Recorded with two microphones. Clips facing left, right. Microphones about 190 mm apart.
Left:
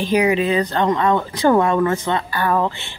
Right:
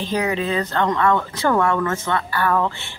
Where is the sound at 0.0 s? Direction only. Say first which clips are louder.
Left 5 dB; 10° left (ahead or behind).